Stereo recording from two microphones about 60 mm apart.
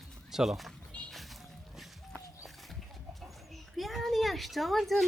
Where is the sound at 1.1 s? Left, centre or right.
Centre.